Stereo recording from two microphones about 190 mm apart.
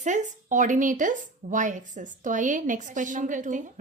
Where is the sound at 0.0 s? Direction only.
40° right (ahead or behind).